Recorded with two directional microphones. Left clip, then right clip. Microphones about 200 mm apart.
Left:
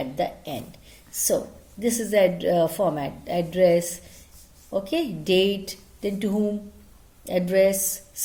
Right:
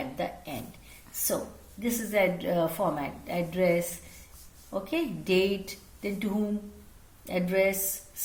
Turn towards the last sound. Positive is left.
turn(degrees=50)  # may be behind; listen again after turning